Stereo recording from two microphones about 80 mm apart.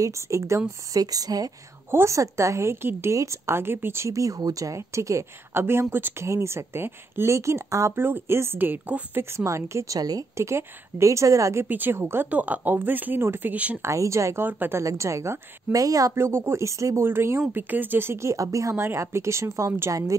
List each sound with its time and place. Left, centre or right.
0.0 s speech: right
0.9 s speech: right
1.9 s speech: right
6.2 s speech: right
9.2 s speech: right
9.9 s speech: right
10.3 s speech: right
11.6 s speech: right
12.3 s speech: centre
13.8 s speech: right
14.5 s speech: right
14.8 s speech: right
16.2 s speech: right